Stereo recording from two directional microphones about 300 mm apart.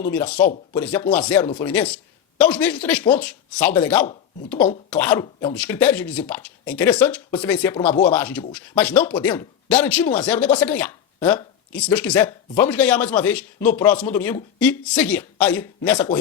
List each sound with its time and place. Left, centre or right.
0.7 s speech: centre
5.2 s speech: centre